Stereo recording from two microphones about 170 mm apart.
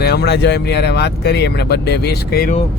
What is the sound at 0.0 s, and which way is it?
Speech, 70° left (ahead or behind).